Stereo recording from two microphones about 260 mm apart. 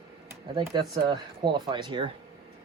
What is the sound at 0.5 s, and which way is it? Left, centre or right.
Speech, centre.